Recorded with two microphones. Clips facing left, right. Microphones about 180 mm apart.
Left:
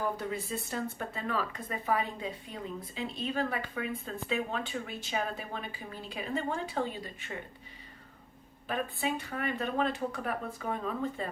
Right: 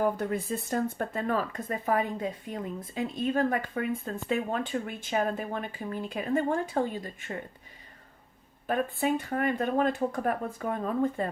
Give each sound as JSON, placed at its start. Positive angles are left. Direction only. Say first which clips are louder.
{"t": 0.0, "sound": "a woman's voice", "louder": "right 6 dB", "side_deg": -50}
{"t": 8.6, "sound": "a woman's voice", "louder": "right 5 dB", "side_deg": -50}